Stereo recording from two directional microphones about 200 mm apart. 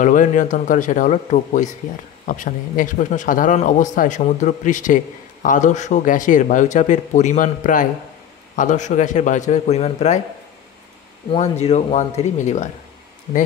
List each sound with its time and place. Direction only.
0.0 s a man's voice: 40° left (ahead or behind)
11.2 s a man's voice: 30° left (ahead or behind)